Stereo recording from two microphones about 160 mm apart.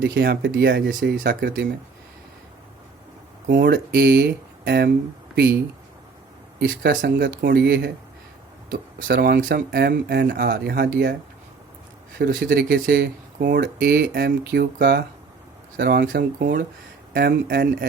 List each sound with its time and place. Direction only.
0.1 s speech: 90° right
3.4 s speech: 60° right (ahead or behind); by 5.5 s 90° right
6.6 s speech: 85° right
8.7 s speech: 70° right (ahead or behind)
12.1 s speech: 70° right (ahead or behind); by 16.5 s 90° right
17.2 s speech: 80° right